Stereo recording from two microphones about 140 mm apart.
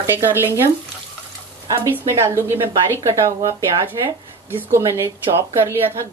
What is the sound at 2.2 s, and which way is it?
A woman's voice, 20° right (ahead or behind).